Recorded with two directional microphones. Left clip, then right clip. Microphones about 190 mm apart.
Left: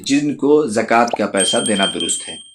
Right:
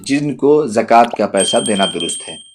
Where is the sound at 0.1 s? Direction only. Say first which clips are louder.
Right 2 dB; 45° right (ahead or behind).